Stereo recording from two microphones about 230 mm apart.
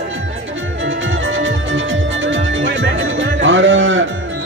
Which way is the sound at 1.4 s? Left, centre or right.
Right.